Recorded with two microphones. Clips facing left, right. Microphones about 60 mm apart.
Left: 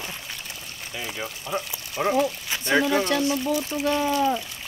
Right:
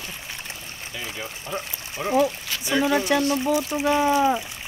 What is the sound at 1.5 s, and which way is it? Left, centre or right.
Speech, right.